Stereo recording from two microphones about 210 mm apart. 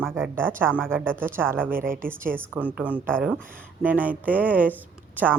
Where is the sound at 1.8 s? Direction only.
40° right (ahead or behind).